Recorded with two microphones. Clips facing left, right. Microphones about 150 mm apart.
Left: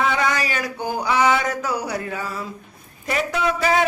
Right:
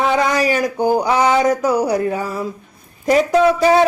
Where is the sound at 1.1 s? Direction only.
35° right (ahead or behind).